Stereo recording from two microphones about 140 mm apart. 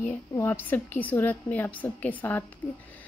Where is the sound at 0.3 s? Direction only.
15° left (ahead or behind).